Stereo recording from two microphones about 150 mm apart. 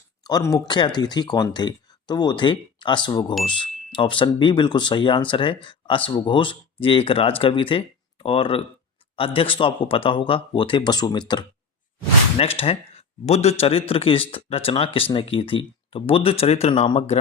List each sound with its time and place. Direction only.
0.3 s a man's voice: 25° left (ahead or behind)